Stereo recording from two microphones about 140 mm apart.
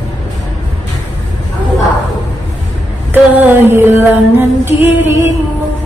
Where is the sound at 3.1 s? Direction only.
15° right (ahead or behind).